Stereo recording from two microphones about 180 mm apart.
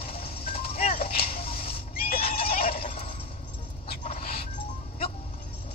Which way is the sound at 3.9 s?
35° left (ahead or behind).